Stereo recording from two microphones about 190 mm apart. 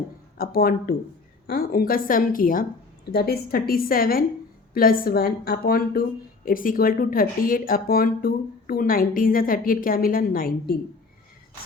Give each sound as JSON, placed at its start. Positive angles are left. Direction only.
{"t": 0.3, "sound": "a woman's voice", "side_deg": 50}